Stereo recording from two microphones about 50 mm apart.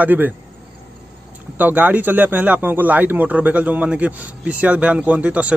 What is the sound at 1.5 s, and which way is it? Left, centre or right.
A man's voice, right.